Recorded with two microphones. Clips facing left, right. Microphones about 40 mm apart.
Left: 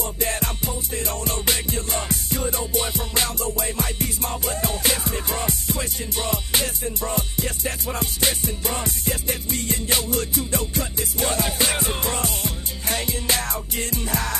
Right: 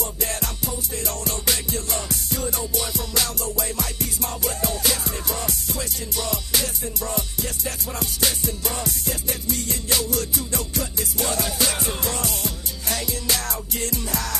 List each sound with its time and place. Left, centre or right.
0.0 s music: left